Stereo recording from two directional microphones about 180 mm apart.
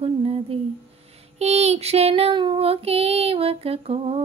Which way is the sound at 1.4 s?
35° right (ahead or behind).